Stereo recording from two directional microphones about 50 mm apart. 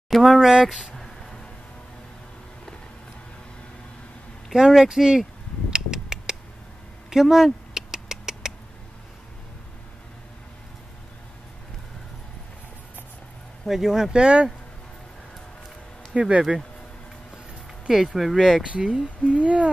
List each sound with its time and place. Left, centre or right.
0.1 s speech: centre
0.9 s a sound: centre
4.5 s speech: centre
5.7 s a sound: centre
7.1 s rodents: centre
13.7 s speech: centre
16.2 s speech: right
17.8 s speech: centre
18.6 s speech: centre